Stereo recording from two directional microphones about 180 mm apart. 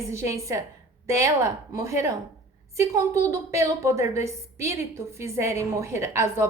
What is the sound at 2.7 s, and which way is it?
A woman's voice, 15° right (ahead or behind).